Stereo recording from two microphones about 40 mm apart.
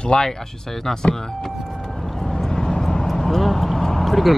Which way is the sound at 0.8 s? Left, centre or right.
Centre.